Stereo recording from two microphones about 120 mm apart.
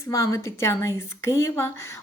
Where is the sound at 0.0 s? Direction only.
30° left (ahead or behind).